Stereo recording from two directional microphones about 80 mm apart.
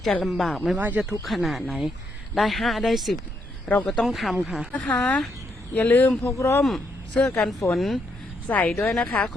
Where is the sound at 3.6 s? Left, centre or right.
Centre.